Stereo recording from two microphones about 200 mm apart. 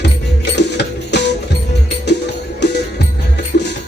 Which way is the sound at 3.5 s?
55° left (ahead or behind).